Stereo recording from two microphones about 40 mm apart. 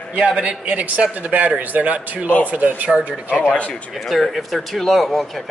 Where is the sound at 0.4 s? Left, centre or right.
Right.